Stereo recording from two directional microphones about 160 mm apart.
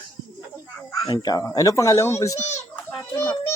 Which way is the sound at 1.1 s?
25° left (ahead or behind).